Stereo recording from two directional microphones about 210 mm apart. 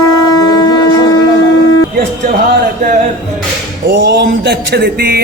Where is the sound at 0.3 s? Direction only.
20° left (ahead or behind).